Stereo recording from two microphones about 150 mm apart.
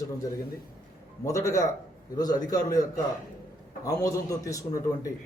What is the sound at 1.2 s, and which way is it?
A man's voice, 20° left (ahead or behind).